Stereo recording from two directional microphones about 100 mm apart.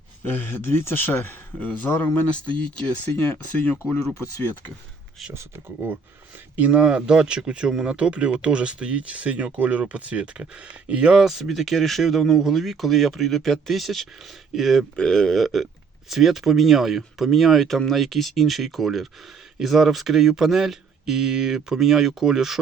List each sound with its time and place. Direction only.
0.3 s speech: 20° left (ahead or behind)
5.3 s speech: 25° right (ahead or behind)
6.6 s speech: 10° right (ahead or behind)